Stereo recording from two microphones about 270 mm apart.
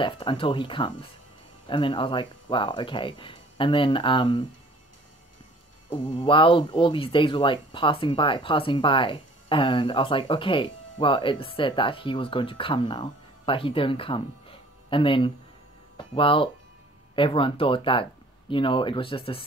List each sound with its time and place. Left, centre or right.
0.0 s speech: centre
5.9 s speech: centre